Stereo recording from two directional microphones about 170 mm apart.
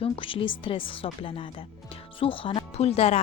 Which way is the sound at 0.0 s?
30° left (ahead or behind).